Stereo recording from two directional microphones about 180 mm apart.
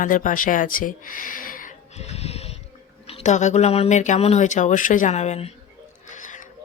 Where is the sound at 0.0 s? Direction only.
45° left (ahead or behind).